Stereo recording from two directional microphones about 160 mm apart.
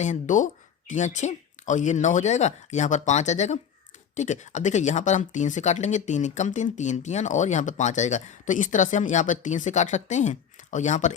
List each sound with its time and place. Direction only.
0.0 s speech: 50° left (ahead or behind)